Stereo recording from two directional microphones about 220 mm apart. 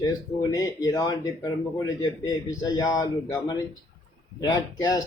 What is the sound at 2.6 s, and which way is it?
A man's voice, 15° left (ahead or behind).